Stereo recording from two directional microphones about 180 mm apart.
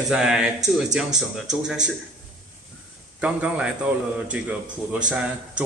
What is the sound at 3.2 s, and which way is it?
Speech, 5° right (ahead or behind).